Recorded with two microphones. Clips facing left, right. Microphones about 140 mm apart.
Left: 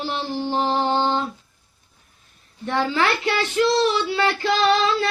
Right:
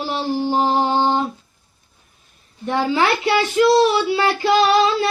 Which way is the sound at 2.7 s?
10° right (ahead or behind).